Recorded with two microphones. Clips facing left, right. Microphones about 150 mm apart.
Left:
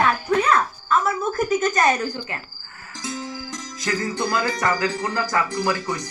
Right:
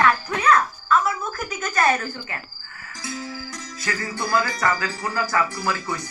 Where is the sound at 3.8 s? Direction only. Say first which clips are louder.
Left 4 dB; 15° left (ahead or behind).